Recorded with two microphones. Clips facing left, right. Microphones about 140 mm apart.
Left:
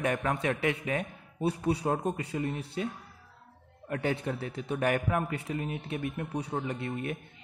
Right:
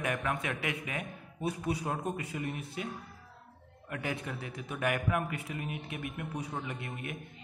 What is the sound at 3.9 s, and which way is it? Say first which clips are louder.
Speech: left 6 dB; 30° left (ahead or behind).